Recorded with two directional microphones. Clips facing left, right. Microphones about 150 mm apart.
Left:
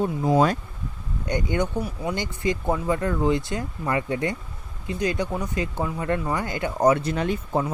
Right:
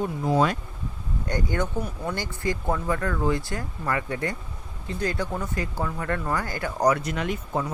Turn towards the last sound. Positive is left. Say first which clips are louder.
# left 3 dB
turn(degrees=30)  # may be behind; listen again after turning